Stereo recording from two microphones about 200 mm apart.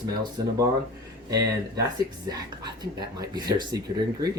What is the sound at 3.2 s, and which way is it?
Speech, 20° right (ahead or behind).